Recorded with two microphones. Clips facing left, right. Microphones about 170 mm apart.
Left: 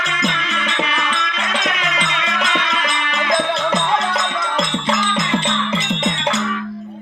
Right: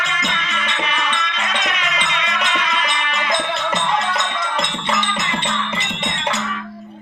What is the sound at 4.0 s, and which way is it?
Music, 90° left.